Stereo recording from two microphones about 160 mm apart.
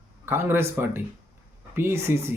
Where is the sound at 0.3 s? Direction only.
15° right (ahead or behind).